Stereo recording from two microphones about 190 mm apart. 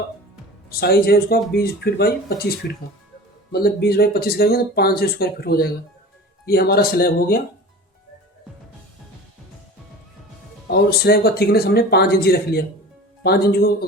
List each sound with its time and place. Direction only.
0.7 s speech: 55° left (ahead or behind)
10.7 s speech: 55° left (ahead or behind)